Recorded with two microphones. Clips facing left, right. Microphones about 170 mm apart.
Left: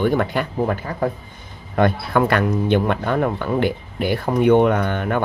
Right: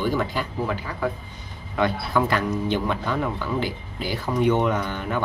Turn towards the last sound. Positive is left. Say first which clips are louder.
# left 5 dB
turn(degrees=60)  # may be behind; listen again after turning